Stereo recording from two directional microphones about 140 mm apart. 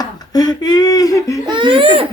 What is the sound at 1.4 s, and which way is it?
Speech, 35° right (ahead or behind).